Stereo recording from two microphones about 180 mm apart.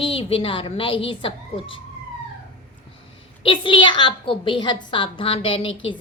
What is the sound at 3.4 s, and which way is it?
A woman's voice, 30° left (ahead or behind).